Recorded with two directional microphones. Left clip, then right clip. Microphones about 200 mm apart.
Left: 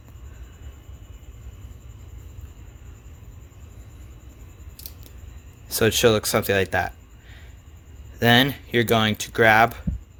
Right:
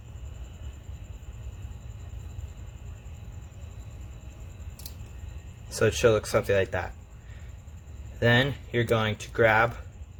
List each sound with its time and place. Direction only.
5.8 s speech: 50° left (ahead or behind)
8.2 s speech: 55° left (ahead or behind)